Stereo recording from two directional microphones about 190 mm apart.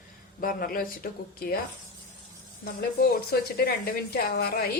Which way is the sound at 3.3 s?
55° left (ahead or behind).